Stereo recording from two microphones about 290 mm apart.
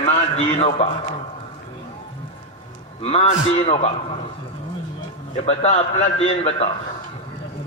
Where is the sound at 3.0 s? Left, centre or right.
Left.